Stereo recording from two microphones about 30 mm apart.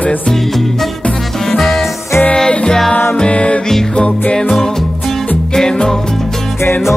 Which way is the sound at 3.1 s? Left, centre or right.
Left.